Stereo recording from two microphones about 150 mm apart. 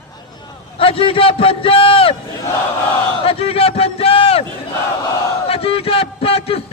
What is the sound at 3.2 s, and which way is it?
A man's voice, 40° left (ahead or behind).